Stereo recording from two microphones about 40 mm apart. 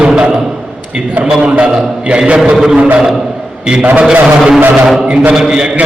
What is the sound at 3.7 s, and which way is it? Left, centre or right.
Speech, right.